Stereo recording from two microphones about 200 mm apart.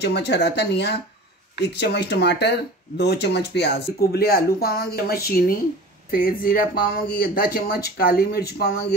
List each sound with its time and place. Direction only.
0.0 s speech: 55° left (ahead or behind)